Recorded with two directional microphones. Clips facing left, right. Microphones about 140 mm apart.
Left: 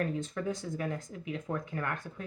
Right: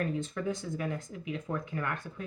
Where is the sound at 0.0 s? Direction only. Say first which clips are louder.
Even; 40° left (ahead or behind).